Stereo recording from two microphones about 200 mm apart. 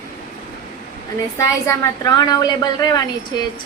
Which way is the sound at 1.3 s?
15° left (ahead or behind).